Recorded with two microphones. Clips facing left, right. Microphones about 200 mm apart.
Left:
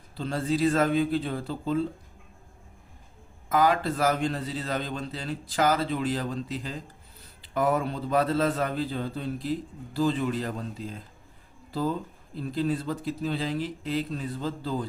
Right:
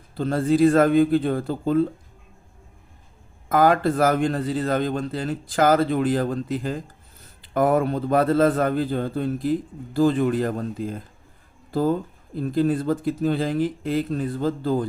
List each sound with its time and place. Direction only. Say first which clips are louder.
0.2 s a man's voice: right 8 dB; 50° right (ahead or behind)
3.5 s a man's voice: right 5 dB; 50° right (ahead or behind)